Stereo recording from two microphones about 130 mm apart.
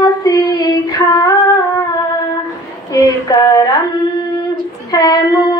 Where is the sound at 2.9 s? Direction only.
30° left (ahead or behind).